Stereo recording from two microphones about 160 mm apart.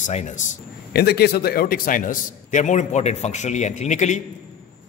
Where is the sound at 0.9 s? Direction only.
85° left.